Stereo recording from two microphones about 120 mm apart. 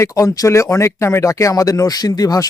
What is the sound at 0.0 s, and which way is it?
Speech, 25° left (ahead or behind).